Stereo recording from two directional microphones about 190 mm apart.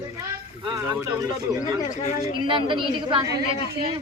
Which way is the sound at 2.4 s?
25° right (ahead or behind).